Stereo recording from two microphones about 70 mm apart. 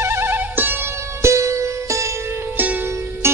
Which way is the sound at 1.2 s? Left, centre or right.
Right.